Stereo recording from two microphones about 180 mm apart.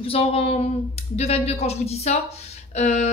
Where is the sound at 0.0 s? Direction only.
35° left (ahead or behind).